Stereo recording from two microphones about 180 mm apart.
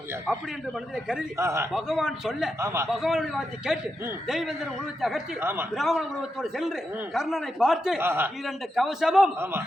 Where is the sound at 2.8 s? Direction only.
Centre (ahead or behind).